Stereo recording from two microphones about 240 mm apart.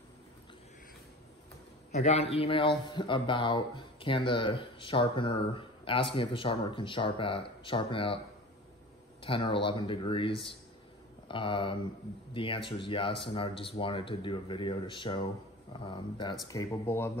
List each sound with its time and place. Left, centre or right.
1.9 s speech: left
9.2 s speech: left